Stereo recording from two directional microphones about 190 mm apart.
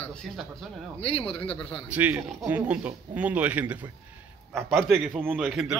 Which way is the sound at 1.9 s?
10° right (ahead or behind).